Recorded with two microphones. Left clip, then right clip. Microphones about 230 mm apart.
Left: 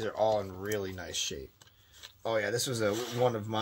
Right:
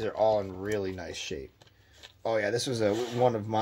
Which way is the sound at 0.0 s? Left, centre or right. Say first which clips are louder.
Right 3 dB; centre.